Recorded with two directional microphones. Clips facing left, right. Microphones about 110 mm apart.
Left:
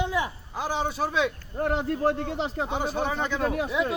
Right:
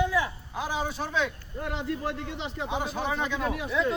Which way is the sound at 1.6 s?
45° left (ahead or behind).